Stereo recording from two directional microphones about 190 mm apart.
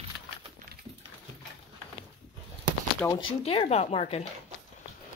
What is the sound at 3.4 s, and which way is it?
Speech, 35° left (ahead or behind).